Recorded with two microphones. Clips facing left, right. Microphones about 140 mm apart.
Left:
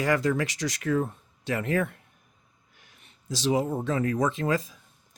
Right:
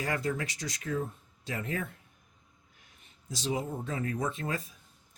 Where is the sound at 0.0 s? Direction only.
90° left; by 2.0 s 70° left (ahead or behind).